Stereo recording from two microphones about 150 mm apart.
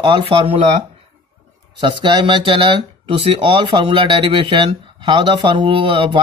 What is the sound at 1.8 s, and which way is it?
Speech, 30° right (ahead or behind).